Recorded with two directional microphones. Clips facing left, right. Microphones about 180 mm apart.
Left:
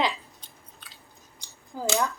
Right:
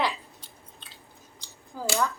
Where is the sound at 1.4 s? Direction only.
15° left (ahead or behind).